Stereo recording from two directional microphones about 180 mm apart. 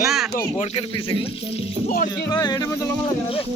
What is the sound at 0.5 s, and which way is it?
Speech, 35° left (ahead or behind).